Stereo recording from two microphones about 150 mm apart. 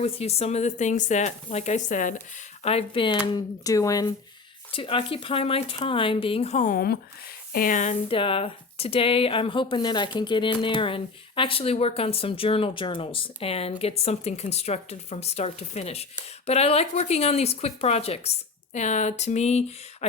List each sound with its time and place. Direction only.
0.0 s speech: 45° left (ahead or behind); by 2.2 s 60° left (ahead or behind)
2.6 s speech: 40° left (ahead or behind); by 4.1 s 20° left (ahead or behind)
4.7 s speech: 35° left (ahead or behind)
6.7 s speech: 90° left
7.5 s speech: 65° left (ahead or behind)
8.0 s speech: 35° left (ahead or behind)